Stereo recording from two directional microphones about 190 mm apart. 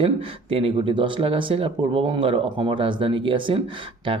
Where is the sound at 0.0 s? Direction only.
30° right (ahead or behind).